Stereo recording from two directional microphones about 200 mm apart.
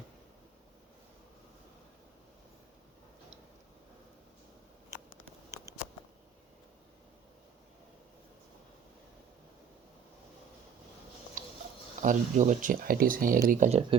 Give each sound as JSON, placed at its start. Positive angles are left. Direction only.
{"t": 12.0, "sound": "speech", "side_deg": -40}